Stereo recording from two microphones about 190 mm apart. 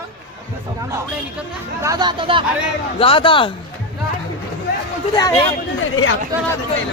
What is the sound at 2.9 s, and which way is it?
Speech, 30° left (ahead or behind).